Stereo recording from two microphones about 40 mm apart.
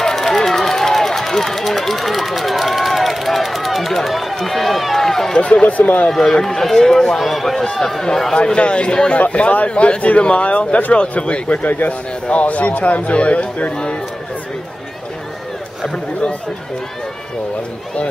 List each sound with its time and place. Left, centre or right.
0.0 s run: centre
4.4 s speech: centre
5.4 s speech: left
5.8 s speech: left
6.0 s speech: centre
7.2 s speech: centre
8.4 s speech: left
9.2 s speech: left
15.9 s speech: left